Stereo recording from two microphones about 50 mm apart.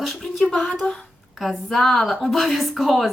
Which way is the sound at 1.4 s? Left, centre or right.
Centre.